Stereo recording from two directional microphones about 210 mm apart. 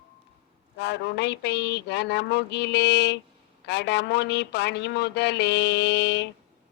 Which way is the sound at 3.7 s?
55° left (ahead or behind).